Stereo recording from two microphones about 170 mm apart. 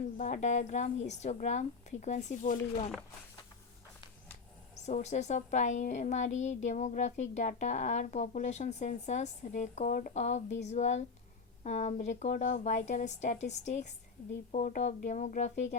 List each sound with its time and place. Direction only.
0.0 s a woman's voice: 45° left (ahead or behind)
4.9 s a woman's voice: 45° left (ahead or behind)